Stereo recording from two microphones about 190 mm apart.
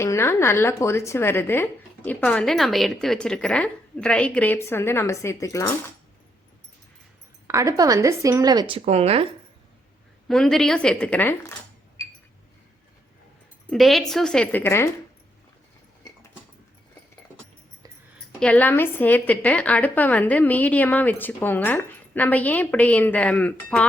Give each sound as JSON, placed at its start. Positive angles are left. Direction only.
{"t": 0.0, "sound": "a woman's voice", "side_deg": 15}
{"t": 7.4, "sound": "speech", "side_deg": -15}
{"t": 10.2, "sound": "a woman's voice", "side_deg": 0}
{"t": 13.7, "sound": "a woman's voice", "side_deg": 0}
{"t": 18.3, "sound": "a woman's voice", "side_deg": 5}